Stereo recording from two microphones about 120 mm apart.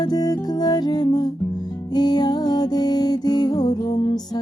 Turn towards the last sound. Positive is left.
turn(degrees=35)  # may be behind; listen again after turning